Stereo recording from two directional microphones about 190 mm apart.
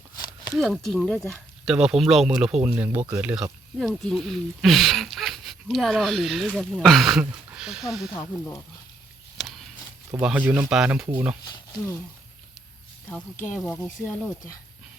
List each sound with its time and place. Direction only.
0.6 s speech: centre (ahead or behind)
8.1 s speech: 20° left (ahead or behind)
9.4 s walk: centre (ahead or behind)
10.2 s speech: 5° right (ahead or behind)
13.4 s speech: centre (ahead or behind)